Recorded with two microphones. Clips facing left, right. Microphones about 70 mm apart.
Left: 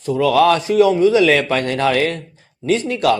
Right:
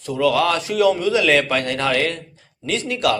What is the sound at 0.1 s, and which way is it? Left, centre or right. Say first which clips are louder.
A man's voice: left 4 dB; left.